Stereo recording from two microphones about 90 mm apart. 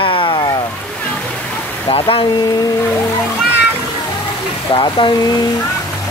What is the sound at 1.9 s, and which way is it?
Speech, 75° left (ahead or behind).